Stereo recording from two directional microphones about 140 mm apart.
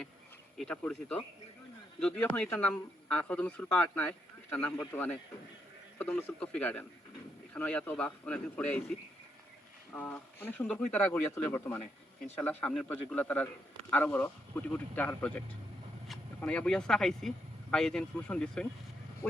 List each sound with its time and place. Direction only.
0.6 s speech: 5° left (ahead or behind)
9.9 s speech: 15° left (ahead or behind)
19.2 s speech: 15° left (ahead or behind)